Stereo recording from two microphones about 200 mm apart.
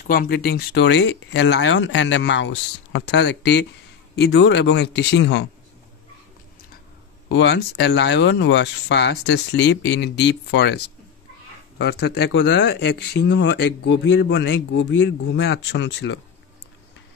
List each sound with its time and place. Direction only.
0.0 s speech: 45° left (ahead or behind)
7.2 s speech: 60° left (ahead or behind)
11.8 s speech: 55° left (ahead or behind)